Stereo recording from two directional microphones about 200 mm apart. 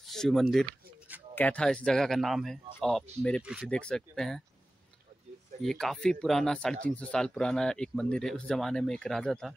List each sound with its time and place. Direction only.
0.0 s a sound: centre (ahead or behind)
1.3 s speech: 5° left (ahead or behind)
5.6 s speech: centre (ahead or behind)